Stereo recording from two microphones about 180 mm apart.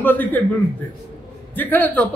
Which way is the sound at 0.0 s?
10° left (ahead or behind).